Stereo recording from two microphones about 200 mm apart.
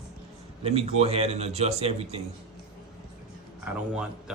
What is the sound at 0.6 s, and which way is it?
A man's voice, 30° right (ahead or behind).